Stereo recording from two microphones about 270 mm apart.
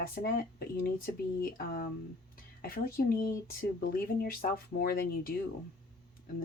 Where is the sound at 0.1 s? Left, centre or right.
Left.